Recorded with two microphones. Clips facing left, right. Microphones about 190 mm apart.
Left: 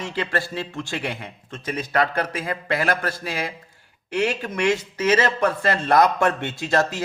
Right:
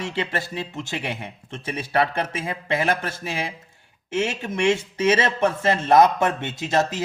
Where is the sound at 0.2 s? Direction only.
20° right (ahead or behind).